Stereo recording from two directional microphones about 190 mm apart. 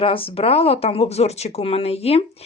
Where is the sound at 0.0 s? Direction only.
30° left (ahead or behind).